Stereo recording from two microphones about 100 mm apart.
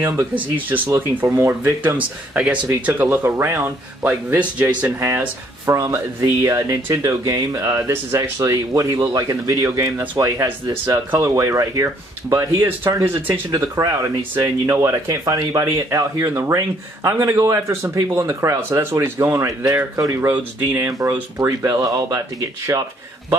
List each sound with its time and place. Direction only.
0.4 s speech: 20° right (ahead or behind)
0.8 s speech: 30° right (ahead or behind); by 4.9 s 15° right (ahead or behind)
5.7 s speech: 30° right (ahead or behind)
21.4 s speech: 35° right (ahead or behind)
22.7 s speech: 30° right (ahead or behind)